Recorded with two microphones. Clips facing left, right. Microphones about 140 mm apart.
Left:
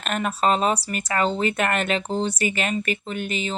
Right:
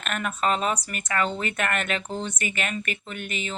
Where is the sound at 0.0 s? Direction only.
35° left (ahead or behind).